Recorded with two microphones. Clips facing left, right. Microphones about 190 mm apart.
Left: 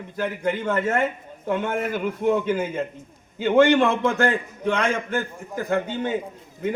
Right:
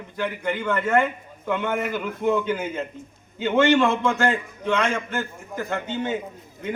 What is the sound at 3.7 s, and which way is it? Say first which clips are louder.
A man's voice: even; 55° left (ahead or behind).